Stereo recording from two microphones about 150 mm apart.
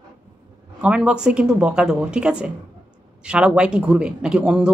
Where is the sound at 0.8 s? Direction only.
5° right (ahead or behind).